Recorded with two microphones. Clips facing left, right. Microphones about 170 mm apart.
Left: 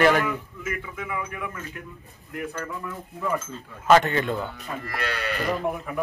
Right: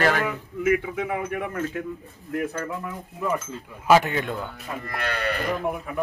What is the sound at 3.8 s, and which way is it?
Speech, 5° right (ahead or behind).